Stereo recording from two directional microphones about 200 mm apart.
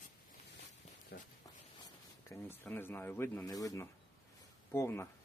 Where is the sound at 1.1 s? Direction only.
50° left (ahead or behind).